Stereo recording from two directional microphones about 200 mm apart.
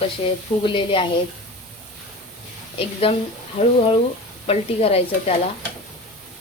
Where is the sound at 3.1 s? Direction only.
25° left (ahead or behind).